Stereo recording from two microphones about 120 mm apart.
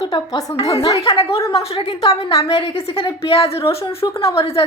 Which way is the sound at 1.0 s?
55° left (ahead or behind).